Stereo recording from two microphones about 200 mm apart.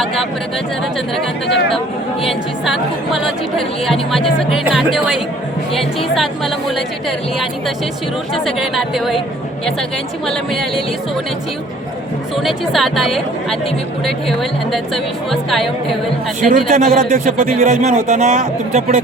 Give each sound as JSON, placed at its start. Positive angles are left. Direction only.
{"t": 2.2, "sound": "speech", "side_deg": 0}
{"t": 4.4, "sound": "speech", "side_deg": -5}
{"t": 8.4, "sound": "speech", "side_deg": 0}
{"t": 10.2, "sound": "speech", "side_deg": 0}
{"t": 12.4, "sound": "speech", "side_deg": 0}
{"t": 16.5, "sound": "speech", "side_deg": -45}